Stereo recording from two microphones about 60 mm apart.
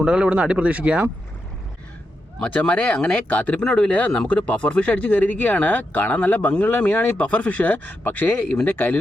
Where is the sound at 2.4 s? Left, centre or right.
Centre.